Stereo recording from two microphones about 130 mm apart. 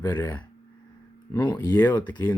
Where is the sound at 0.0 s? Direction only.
25° left (ahead or behind).